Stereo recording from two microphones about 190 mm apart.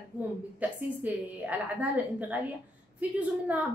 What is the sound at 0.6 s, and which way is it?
A woman's voice, 10° right (ahead or behind).